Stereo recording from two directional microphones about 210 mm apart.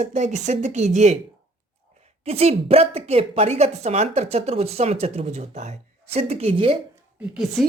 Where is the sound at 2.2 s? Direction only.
30° right (ahead or behind).